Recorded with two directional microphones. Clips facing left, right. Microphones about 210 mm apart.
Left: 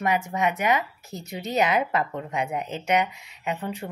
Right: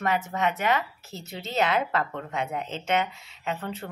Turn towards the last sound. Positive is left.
turn(degrees=15)  # may be behind; listen again after turning